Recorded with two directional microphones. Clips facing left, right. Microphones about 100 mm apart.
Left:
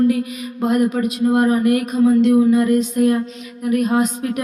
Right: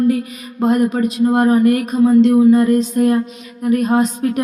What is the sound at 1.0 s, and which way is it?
Speech, 35° right (ahead or behind).